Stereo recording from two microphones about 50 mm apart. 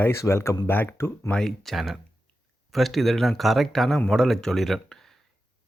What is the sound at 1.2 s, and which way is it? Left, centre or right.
Speech, centre.